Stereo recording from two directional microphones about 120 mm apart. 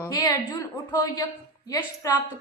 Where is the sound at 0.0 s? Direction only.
30° left (ahead or behind).